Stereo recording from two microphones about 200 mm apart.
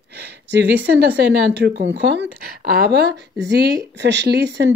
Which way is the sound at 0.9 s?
60° right (ahead or behind).